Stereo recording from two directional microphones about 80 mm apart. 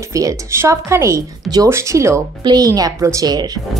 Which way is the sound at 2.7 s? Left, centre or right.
Right.